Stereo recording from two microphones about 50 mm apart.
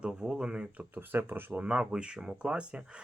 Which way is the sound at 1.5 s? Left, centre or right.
Right.